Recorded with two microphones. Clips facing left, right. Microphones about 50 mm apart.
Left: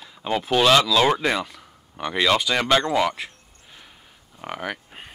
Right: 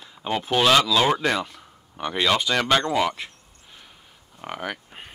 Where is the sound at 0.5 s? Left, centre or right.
Centre.